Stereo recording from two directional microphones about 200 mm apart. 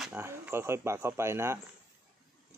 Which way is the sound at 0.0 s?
10° right (ahead or behind).